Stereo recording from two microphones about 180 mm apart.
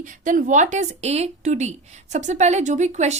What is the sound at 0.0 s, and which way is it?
A woman's voice, 45° right (ahead or behind).